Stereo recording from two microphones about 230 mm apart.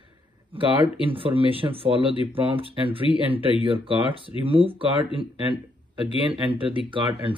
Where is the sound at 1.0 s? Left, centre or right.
Right.